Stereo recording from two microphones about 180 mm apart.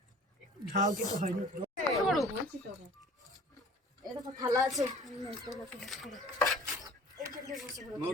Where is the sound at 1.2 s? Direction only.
45° right (ahead or behind).